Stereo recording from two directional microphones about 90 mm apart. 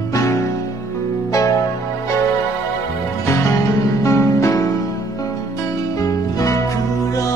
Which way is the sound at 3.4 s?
35° left (ahead or behind).